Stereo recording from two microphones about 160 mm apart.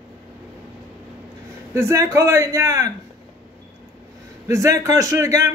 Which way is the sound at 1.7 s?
15° right (ahead or behind).